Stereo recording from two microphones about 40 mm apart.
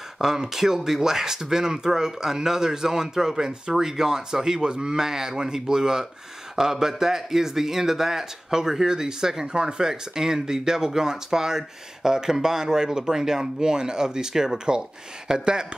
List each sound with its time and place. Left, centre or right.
0.2 s speech: centre